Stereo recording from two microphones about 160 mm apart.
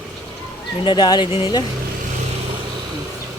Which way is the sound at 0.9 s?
25° left (ahead or behind).